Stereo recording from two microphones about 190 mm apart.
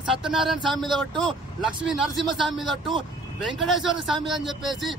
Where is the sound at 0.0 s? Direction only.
Centre (ahead or behind).